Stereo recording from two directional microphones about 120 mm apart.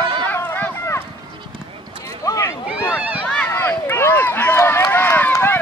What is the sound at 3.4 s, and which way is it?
Run, 20° left (ahead or behind).